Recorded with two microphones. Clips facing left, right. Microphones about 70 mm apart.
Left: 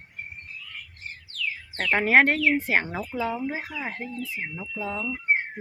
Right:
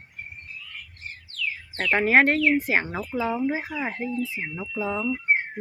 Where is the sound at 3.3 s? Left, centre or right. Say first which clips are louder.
Right 4 dB; centre.